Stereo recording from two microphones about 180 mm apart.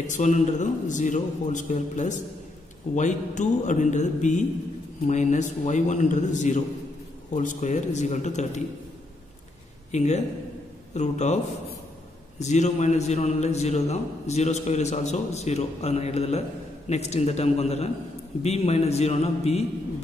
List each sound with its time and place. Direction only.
0.0 s a man's voice: 40° left (ahead or behind)
9.8 s a man's voice: 40° left (ahead or behind)
12.4 s a man's voice: 40° left (ahead or behind)